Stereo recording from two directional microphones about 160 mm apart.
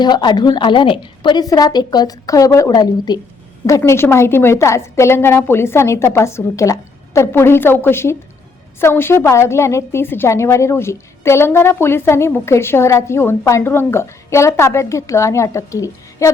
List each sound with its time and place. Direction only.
0.0 s a woman's voice: 25° left (ahead or behind)